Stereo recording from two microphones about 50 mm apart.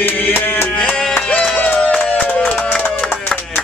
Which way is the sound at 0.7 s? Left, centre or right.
Centre.